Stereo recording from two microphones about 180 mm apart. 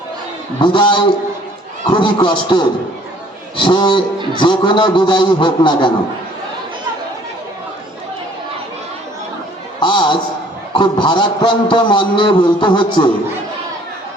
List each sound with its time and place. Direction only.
0.6 s a man's voice: 25° left (ahead or behind)
9.8 s a sound: 25° left (ahead or behind)
10.8 s a man's voice: 25° left (ahead or behind)